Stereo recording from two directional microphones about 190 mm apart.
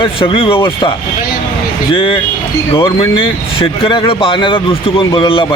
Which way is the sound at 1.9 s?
25° left (ahead or behind).